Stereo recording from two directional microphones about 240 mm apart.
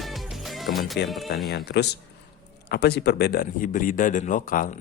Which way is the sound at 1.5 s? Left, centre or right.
Left.